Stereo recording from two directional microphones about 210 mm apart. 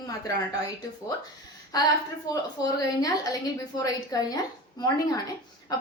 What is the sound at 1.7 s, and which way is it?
A woman's voice, 15° left (ahead or behind).